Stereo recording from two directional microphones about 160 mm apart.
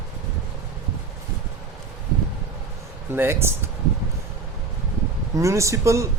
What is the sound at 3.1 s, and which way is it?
Speech, 15° right (ahead or behind).